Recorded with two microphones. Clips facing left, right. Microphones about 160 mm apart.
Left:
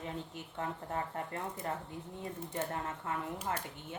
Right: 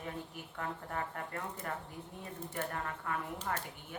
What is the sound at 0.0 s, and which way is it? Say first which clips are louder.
Speech: left 1 dB; 25° left (ahead or behind).